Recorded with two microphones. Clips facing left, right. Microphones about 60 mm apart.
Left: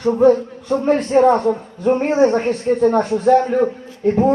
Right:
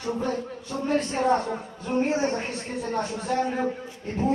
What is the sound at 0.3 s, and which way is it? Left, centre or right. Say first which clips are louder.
A man's voice: left 16 dB; left.